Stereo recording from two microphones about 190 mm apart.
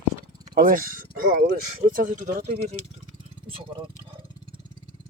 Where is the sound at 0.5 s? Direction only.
50° right (ahead or behind).